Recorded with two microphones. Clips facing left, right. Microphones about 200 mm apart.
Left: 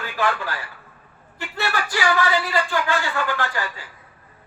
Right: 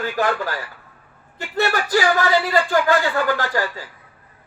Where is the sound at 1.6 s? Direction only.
40° right (ahead or behind).